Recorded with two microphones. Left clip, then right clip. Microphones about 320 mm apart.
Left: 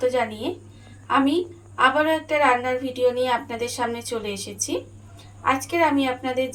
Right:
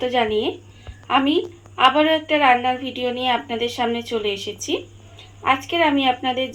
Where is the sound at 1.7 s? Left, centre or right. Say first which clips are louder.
Right 3 dB; centre.